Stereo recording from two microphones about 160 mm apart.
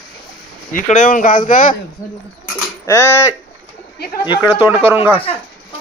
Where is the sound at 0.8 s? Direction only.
55° left (ahead or behind).